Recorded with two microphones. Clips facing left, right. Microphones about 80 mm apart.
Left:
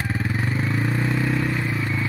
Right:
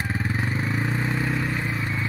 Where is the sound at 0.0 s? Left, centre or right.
Right.